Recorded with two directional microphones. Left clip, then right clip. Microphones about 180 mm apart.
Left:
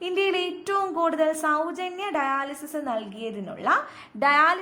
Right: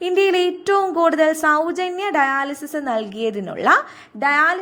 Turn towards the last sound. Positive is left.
turn(degrees=-15)  # may be behind; listen again after turning